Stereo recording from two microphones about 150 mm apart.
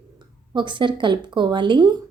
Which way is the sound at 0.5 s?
30° right (ahead or behind).